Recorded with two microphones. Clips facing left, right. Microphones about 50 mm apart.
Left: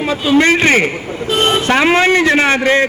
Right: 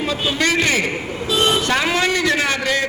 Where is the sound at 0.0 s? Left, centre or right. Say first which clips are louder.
Left 8 dB; left.